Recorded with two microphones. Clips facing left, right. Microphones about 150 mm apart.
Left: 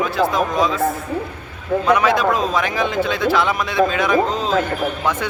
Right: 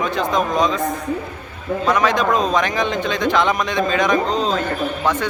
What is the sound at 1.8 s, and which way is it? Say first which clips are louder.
A man's voice: left 1 dB; 10° left (ahead or behind).